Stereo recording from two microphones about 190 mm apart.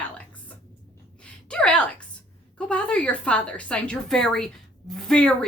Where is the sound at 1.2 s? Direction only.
5° left (ahead or behind).